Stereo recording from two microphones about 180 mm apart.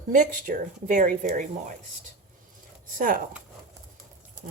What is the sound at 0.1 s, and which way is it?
Speech, 50° right (ahead or behind).